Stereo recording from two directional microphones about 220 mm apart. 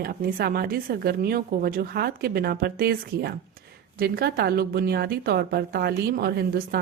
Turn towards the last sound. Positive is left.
turn(degrees=-45)  # may be behind; listen again after turning